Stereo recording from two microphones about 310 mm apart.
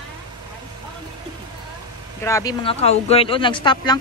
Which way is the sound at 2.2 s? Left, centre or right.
Centre.